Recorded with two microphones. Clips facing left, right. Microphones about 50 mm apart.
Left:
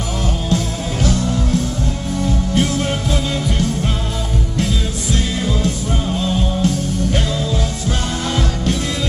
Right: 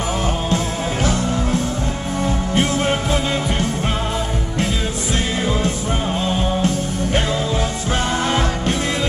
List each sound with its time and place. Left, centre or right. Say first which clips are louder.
1.0 s music: left 2 dB; centre
6.2 s music: left 1 dB; right